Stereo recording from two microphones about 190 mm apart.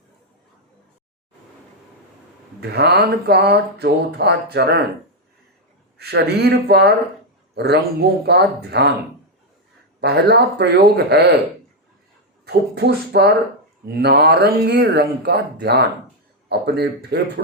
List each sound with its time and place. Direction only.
2.6 s speech: 60° right (ahead or behind)
6.0 s speech: 60° right (ahead or behind)
10.0 s speech: 60° right (ahead or behind)
12.5 s speech: 55° right (ahead or behind)